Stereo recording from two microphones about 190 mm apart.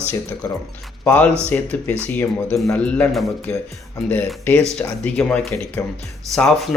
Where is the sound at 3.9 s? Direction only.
10° left (ahead or behind).